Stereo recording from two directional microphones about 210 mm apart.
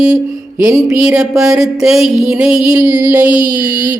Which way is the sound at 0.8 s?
Centre (ahead or behind).